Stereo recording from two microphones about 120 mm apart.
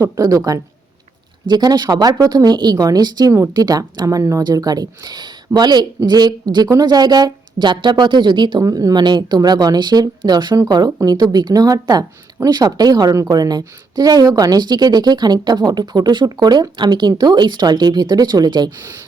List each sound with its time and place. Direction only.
0.0 s speech: 30° right (ahead or behind)